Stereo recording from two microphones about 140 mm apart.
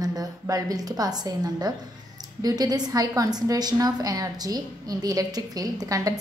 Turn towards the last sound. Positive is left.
turn(degrees=-25)  # may be behind; listen again after turning